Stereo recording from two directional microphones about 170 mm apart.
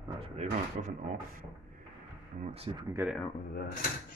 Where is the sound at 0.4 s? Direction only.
45° right (ahead or behind).